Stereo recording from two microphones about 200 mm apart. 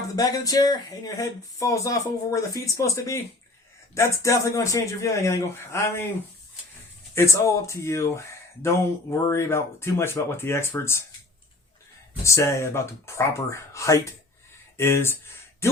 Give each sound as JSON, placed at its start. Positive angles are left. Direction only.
{"t": 0.2, "sound": "speech", "side_deg": 20}
{"t": 7.2, "sound": "speech", "side_deg": 15}
{"t": 12.2, "sound": "speech", "side_deg": 15}